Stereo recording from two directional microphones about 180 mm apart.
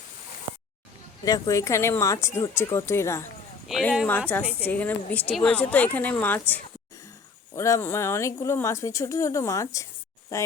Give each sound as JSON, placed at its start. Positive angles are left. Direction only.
{"t": 1.2, "sound": "a woman's voice", "side_deg": 20}
{"t": 3.7, "sound": "a woman's voice", "side_deg": 0}
{"t": 7.5, "sound": "a woman's voice", "side_deg": 15}